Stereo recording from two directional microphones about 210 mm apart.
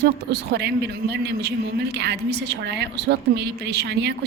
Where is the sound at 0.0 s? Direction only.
50° right (ahead or behind).